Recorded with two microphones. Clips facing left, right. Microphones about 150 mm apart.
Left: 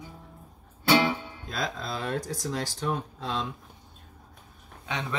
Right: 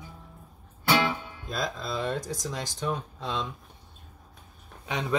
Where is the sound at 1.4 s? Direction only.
Centre (ahead or behind).